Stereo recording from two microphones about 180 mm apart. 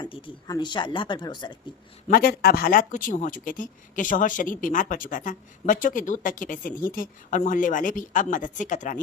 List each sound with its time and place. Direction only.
0.0 s speech: 25° left (ahead or behind)
2.0 s speech: 55° left (ahead or behind)